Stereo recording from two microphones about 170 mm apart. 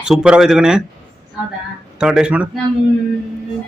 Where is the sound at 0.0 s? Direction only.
5° right (ahead or behind).